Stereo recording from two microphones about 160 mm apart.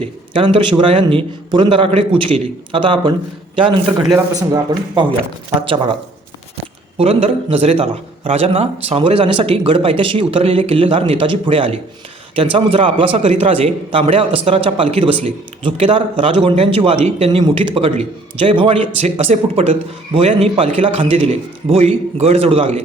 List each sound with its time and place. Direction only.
0.0 s a man's voice: 35° right (ahead or behind)